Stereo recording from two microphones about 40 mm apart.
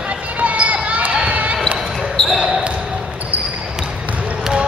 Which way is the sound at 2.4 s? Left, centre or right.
Centre.